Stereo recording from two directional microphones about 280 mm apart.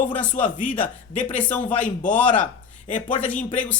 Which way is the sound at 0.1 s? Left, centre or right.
Centre.